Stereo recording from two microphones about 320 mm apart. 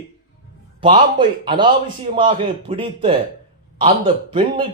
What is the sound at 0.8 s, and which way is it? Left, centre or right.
Speech, centre.